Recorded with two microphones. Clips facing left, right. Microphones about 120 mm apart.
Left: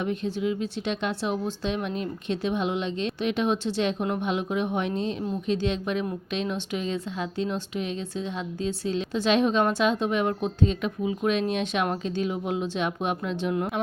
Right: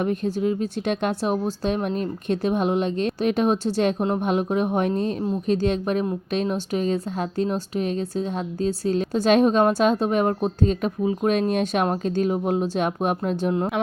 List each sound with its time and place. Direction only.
0.0 s speech: 45° right (ahead or behind)